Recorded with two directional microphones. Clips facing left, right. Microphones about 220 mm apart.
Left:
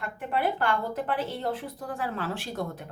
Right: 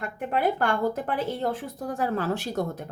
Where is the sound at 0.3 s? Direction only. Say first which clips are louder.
Right 3 dB; 45° right (ahead or behind).